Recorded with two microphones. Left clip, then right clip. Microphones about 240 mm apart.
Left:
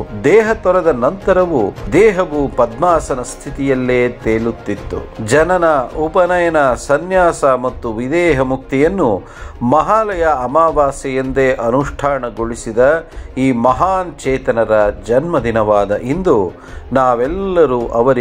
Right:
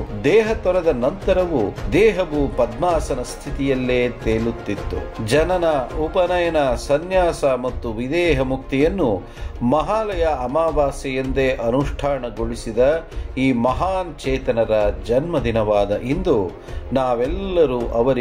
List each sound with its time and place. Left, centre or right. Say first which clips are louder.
0.2 s speech: left 6 dB; centre